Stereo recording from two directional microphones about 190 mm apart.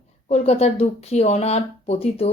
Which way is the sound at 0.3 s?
35° left (ahead or behind).